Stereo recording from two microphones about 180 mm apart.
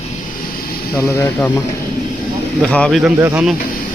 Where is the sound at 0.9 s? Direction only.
20° left (ahead or behind).